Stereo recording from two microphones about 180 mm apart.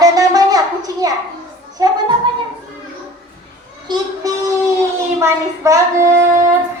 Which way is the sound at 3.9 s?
25° right (ahead or behind).